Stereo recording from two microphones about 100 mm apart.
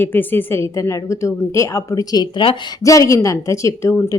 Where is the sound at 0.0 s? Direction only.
20° left (ahead or behind).